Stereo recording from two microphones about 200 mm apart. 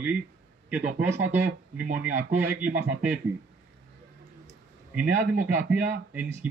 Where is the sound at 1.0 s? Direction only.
10° right (ahead or behind).